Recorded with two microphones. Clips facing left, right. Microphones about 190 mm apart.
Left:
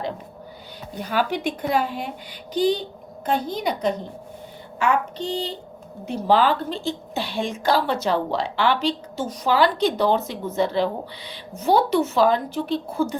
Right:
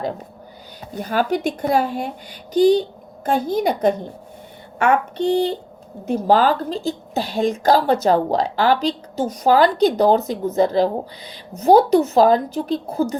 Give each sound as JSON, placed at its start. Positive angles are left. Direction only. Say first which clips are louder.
{"t": 0.9, "sound": "speech", "louder": "right 4 dB", "side_deg": -45}
{"t": 6.1, "sound": "a woman's voice", "louder": "right 3 dB", "side_deg": -45}